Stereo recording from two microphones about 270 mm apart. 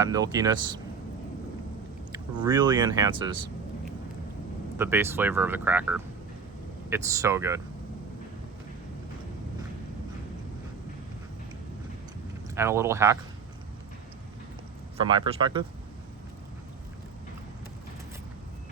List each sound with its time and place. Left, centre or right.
0.0 s speech: centre
2.1 s speech: centre
4.8 s speech: centre
12.5 s speech: centre
15.0 s speech: centre